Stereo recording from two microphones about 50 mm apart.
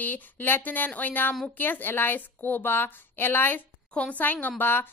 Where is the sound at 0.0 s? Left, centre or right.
Left.